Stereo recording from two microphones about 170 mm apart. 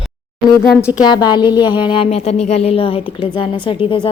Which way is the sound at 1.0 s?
25° left (ahead or behind).